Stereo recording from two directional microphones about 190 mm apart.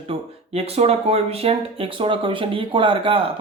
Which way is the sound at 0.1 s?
30° right (ahead or behind).